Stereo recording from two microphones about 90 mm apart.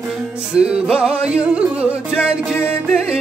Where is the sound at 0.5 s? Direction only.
10° right (ahead or behind).